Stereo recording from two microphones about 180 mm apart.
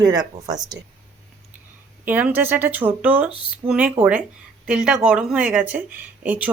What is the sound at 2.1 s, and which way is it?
A woman's voice, 10° right (ahead or behind).